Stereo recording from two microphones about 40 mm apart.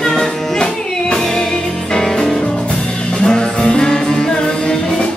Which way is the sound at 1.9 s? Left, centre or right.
Centre.